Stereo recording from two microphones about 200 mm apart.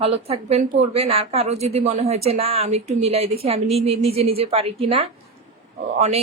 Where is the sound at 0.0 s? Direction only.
30° right (ahead or behind).